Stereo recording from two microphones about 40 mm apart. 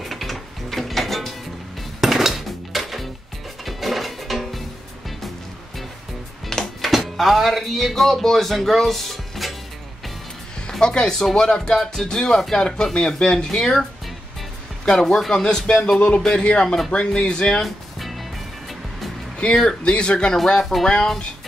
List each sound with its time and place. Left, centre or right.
0.0 s mechanisms: centre
2.0 s music: centre
6.6 s speech: centre
10.8 s speech: centre
11.8 s speech: centre
12.1 s speech: centre
14.9 s speech: centre
16.9 s speech: left
17.6 s music: centre
19.3 s speech: centre